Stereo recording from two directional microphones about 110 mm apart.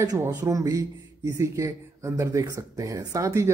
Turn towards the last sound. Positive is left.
turn(degrees=-30)  # may be behind; listen again after turning